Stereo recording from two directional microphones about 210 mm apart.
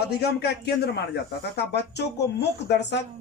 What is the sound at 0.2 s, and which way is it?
Speech, 50° left (ahead or behind).